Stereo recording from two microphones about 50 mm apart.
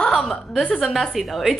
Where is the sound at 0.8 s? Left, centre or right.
Centre.